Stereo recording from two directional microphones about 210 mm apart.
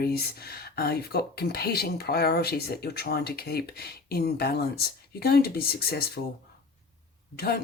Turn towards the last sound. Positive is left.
turn(degrees=50)  # may be behind; listen again after turning